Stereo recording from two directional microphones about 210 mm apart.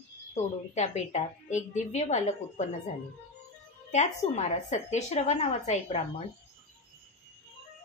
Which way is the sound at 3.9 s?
35° left (ahead or behind).